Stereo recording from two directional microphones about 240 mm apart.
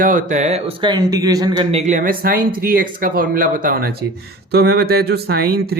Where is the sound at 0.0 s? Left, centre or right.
Right.